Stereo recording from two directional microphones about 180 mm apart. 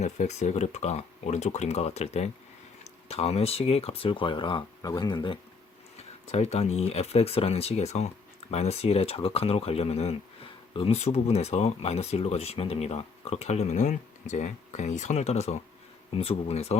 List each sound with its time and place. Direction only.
0.0 s speech: 40° left (ahead or behind)
6.0 s speech: 35° left (ahead or behind)